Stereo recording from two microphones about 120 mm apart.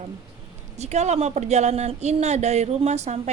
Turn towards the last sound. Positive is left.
turn(degrees=-65)  # may be behind; listen again after turning